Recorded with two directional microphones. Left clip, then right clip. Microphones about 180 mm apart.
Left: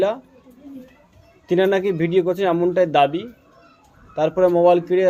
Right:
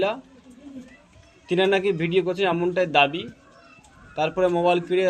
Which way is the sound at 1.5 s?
50° left (ahead or behind).